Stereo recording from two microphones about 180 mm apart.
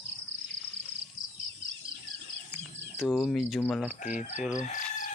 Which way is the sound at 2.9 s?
Centre (ahead or behind).